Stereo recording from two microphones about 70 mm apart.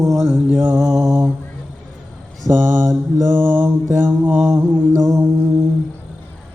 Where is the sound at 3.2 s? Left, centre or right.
Centre.